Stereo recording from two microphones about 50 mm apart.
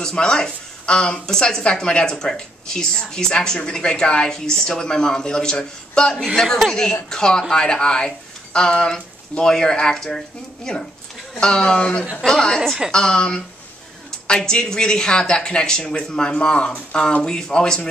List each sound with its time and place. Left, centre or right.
0.0 s speech: centre